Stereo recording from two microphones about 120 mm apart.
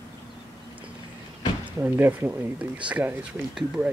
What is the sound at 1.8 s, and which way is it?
Speech, 15° right (ahead or behind).